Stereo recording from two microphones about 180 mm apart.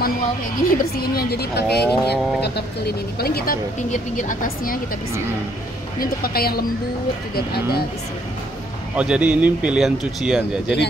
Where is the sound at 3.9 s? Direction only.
45° left (ahead or behind).